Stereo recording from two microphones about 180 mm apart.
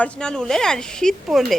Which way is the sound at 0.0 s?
5° left (ahead or behind).